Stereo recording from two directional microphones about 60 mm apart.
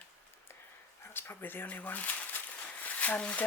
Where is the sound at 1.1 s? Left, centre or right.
Left.